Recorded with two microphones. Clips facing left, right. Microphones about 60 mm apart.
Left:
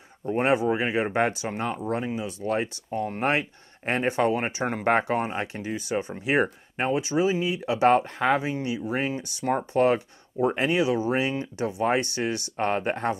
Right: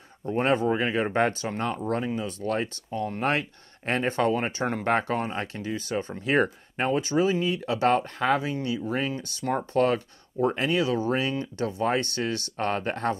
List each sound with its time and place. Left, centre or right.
0.2 s speech: centre